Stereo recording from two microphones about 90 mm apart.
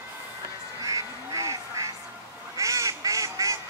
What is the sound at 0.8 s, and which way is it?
Duck, 40° right (ahead or behind).